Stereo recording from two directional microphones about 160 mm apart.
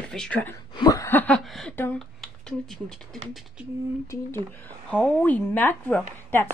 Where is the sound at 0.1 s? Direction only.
5° left (ahead or behind).